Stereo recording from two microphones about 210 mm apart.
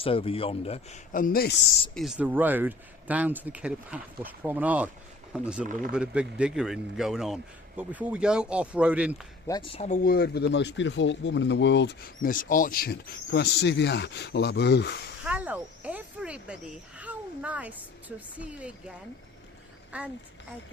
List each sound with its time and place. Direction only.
0.0 s speech: 25° left (ahead or behind)
1.1 s speech: 45° left (ahead or behind)
2.0 s speech: 5° right (ahead or behind)
9.5 s speech: 25° left (ahead or behind)
10.0 s speech: 45° left (ahead or behind)
15.2 s speech: 5° right (ahead or behind)
17.0 s a sound: 5° right (ahead or behind)
18.3 s speech: 5° right (ahead or behind)